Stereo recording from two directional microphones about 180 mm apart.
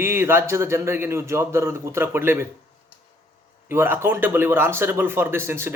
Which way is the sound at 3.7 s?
15° right (ahead or behind).